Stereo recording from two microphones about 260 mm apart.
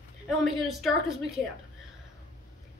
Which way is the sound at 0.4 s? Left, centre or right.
Centre.